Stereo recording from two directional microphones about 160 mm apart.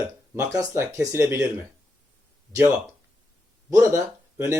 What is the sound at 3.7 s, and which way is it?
Speech, 20° right (ahead or behind).